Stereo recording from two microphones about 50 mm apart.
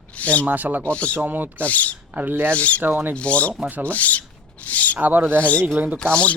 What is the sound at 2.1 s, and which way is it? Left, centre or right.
Speech, right.